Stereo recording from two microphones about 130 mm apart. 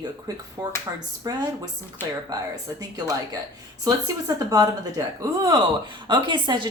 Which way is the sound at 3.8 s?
30° right (ahead or behind).